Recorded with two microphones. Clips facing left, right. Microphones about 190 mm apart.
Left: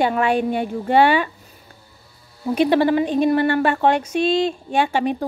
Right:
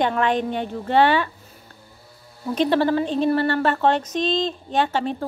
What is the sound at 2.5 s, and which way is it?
A woman's voice, 10° left (ahead or behind).